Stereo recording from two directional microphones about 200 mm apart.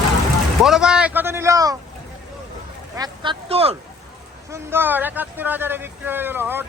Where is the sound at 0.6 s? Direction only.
5° right (ahead or behind).